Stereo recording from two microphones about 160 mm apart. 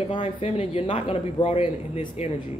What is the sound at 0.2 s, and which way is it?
Speech, 40° left (ahead or behind).